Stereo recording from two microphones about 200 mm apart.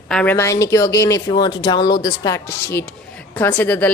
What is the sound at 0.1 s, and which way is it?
A woman's voice, 5° left (ahead or behind).